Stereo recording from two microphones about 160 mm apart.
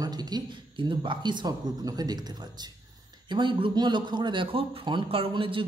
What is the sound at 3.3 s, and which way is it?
A man's voice, 30° right (ahead or behind).